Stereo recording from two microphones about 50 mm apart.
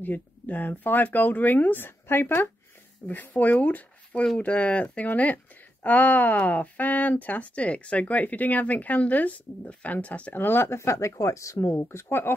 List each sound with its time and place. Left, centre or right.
0.0 s speech: left
3.1 s speech: left
10.3 s speech: left
11.8 s speech: left